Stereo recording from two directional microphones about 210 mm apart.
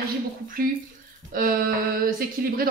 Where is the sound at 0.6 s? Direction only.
45° right (ahead or behind).